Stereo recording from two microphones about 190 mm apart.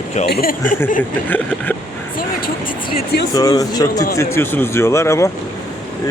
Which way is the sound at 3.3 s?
20° left (ahead or behind).